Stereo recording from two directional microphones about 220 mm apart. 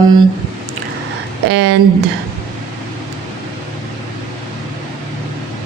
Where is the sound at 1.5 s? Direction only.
50° right (ahead or behind).